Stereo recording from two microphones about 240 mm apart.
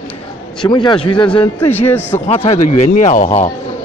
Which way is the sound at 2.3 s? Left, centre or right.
Left.